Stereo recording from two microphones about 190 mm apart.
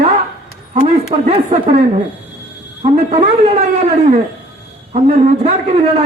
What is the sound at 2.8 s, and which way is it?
A man's voice, 35° right (ahead or behind).